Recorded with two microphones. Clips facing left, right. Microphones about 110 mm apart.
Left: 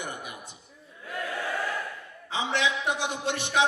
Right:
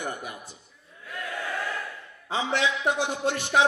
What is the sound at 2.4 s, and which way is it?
A man's voice, 20° left (ahead or behind).